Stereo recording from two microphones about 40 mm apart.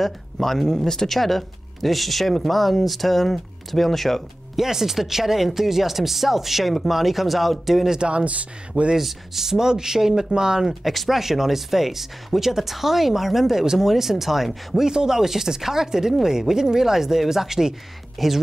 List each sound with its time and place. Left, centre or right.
0.0 s speech: centre
4.6 s speech: centre
8.0 s speech: right
8.9 s speech: centre
10.7 s speech: centre
14.9 s speech: centre
18.2 s speech: centre